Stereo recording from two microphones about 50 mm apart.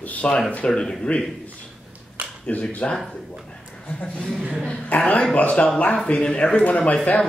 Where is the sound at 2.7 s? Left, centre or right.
Left.